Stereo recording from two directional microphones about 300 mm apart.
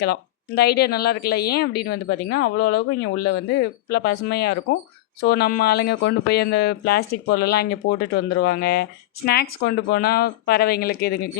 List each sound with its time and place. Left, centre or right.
0.0 s speech: left